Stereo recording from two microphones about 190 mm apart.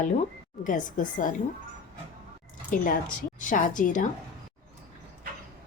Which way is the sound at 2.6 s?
45° left (ahead or behind).